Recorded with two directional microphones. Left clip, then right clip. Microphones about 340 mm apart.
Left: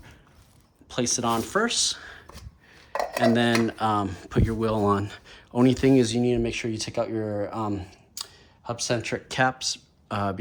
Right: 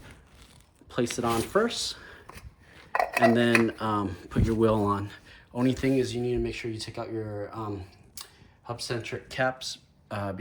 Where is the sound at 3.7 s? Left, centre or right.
Centre.